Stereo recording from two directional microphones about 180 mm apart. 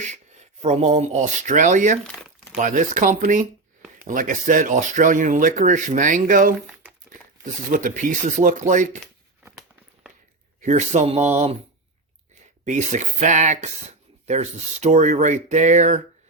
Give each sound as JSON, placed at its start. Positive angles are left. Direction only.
{"t": 0.1, "sound": "speech", "side_deg": -40}
{"t": 10.6, "sound": "speech", "side_deg": -40}
{"t": 12.6, "sound": "speech", "side_deg": -40}